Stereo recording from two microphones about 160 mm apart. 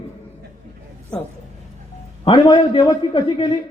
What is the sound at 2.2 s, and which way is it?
Speech, 30° left (ahead or behind).